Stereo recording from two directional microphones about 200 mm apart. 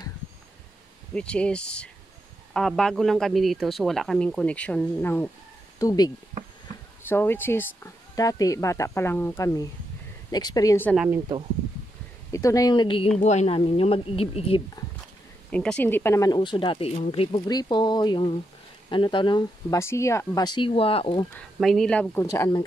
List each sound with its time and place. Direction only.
1.1 s a man's voice: 5° left (ahead or behind)
12.3 s speech: 15° left (ahead or behind)
15.5 s speech: 5° left (ahead or behind); by 21.3 s 25° left (ahead or behind)
21.5 s speech: centre (ahead or behind)